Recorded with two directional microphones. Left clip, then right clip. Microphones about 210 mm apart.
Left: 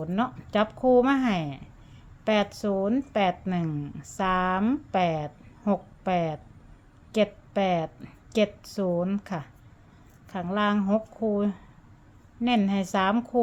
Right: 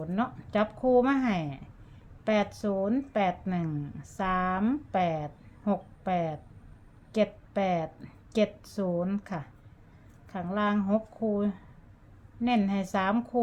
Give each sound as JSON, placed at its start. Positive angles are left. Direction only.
{"t": 0.0, "sound": "a woman's voice", "side_deg": 15}